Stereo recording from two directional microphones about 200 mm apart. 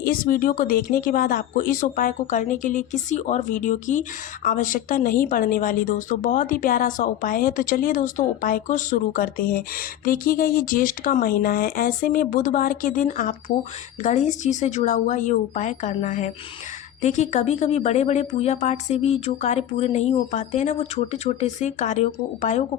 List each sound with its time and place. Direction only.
0.0 s a woman's voice: 45° left (ahead or behind)